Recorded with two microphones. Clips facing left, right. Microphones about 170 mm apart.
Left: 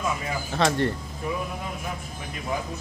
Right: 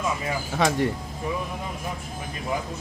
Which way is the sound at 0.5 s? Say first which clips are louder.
Even; 10° right (ahead or behind).